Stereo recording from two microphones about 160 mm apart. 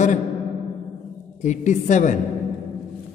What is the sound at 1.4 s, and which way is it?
Speech, 50° left (ahead or behind).